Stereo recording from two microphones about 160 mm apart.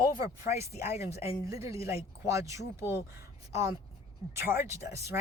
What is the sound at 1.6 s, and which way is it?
Speech, 20° right (ahead or behind).